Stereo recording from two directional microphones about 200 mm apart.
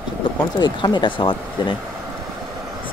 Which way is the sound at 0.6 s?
20° left (ahead or behind).